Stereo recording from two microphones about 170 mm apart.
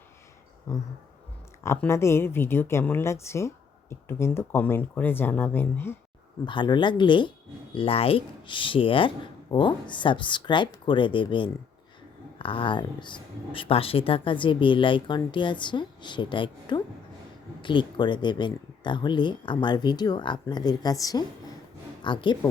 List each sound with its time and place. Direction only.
1.6 s a woman's voice: 15° left (ahead or behind)
6.4 s speech: 25° left (ahead or behind)